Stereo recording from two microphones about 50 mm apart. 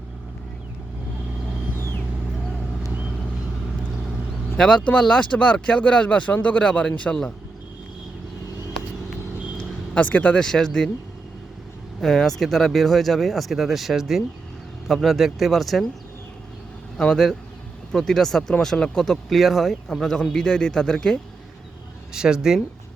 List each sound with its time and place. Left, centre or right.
4.5 s speech: centre
9.9 s speech: left
10.4 s speech: centre
11.9 s speech: centre
17.0 s speech: centre
19.3 s speech: centre
22.1 s speech: centre